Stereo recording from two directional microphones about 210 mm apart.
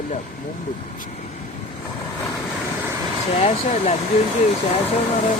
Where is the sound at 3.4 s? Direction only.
30° left (ahead or behind).